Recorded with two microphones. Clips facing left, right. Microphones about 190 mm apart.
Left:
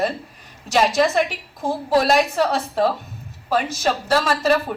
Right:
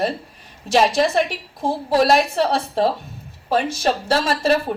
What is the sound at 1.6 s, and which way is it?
A woman's voice, 30° right (ahead or behind).